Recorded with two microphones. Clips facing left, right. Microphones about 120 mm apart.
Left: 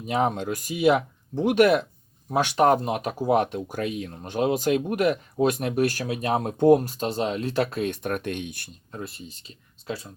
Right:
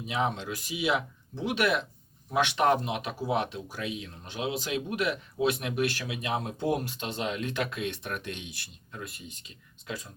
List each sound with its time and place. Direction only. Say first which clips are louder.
0.0 s speech: left 6 dB; 45° left (ahead or behind)